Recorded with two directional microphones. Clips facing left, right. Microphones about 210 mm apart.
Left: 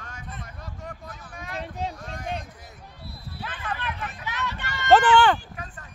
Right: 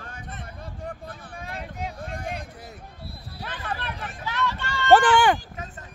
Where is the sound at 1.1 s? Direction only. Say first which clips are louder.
Right 2 dB; 30° right (ahead or behind).